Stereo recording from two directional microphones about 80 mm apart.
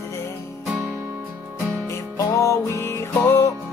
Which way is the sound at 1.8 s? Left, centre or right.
Left.